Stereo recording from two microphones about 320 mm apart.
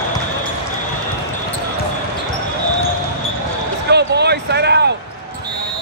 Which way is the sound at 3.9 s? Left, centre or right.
Right.